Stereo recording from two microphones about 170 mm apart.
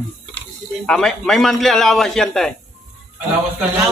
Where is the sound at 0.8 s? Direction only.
5° left (ahead or behind).